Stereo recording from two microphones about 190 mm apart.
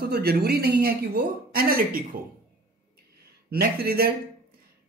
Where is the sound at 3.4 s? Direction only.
55° right (ahead or behind).